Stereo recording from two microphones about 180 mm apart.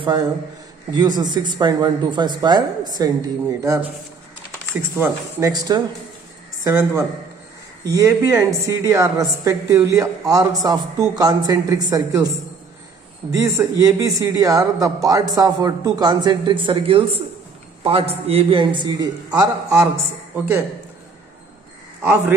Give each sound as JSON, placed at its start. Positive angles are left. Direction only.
{"t": 0.0, "sound": "a man's voice", "side_deg": -20}
{"t": 4.9, "sound": "a woman's voice", "side_deg": -15}
{"t": 13.3, "sound": "a woman's voice", "side_deg": -15}